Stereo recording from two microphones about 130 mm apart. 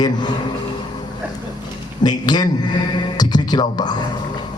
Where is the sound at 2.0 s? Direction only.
30° left (ahead or behind).